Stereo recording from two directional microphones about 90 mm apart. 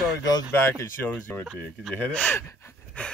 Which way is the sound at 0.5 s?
25° left (ahead or behind).